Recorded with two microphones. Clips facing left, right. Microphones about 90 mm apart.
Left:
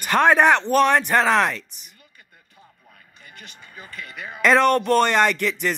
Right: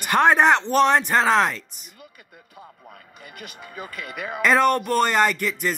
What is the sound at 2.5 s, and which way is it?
Radio, 65° right (ahead or behind).